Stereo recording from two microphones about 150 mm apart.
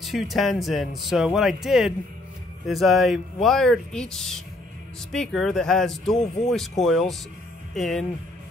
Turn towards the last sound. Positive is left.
turn(degrees=0)  # may be behind; listen again after turning